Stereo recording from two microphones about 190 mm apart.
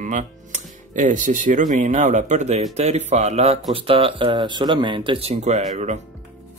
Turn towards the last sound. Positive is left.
turn(degrees=-35)  # may be behind; listen again after turning